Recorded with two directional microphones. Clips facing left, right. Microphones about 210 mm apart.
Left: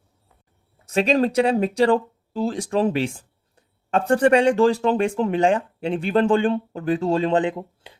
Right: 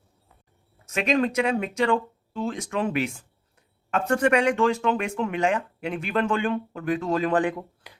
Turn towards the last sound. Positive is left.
turn(degrees=25)  # may be behind; listen again after turning